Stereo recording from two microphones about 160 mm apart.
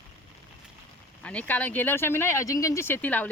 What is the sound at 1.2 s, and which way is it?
Speech, 10° left (ahead or behind).